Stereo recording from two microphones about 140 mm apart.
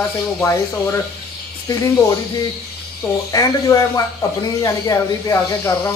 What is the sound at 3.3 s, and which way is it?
Speech, 25° left (ahead or behind).